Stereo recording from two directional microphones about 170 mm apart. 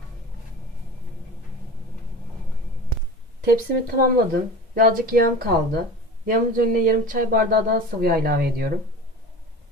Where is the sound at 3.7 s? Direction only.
60° right (ahead or behind).